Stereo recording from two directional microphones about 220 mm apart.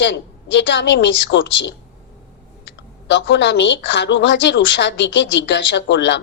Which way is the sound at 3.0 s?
55° left (ahead or behind).